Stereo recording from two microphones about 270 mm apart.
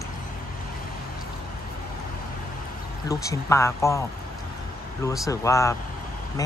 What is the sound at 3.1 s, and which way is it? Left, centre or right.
Speech, centre.